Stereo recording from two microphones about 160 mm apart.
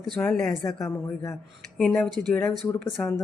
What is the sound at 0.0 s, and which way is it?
Speech, 5° left (ahead or behind).